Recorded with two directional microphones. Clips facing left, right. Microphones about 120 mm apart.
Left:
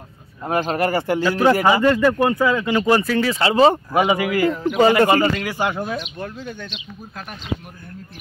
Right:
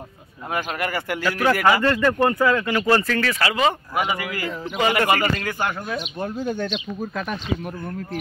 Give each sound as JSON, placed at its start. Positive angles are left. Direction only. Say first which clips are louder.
{"t": 0.5, "sound": "speech", "louder": "left 6 dB", "side_deg": 30}
{"t": 4.1, "sound": "speech", "louder": "left 9 dB", "side_deg": 20}
{"t": 4.7, "sound": "speech", "louder": "left 5 dB", "side_deg": 30}
{"t": 6.4, "sound": "speech", "louder": "right 7 dB", "side_deg": -45}